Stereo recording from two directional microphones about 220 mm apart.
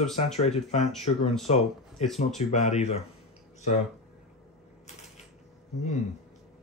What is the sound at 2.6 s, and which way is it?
Speech, 30° left (ahead or behind).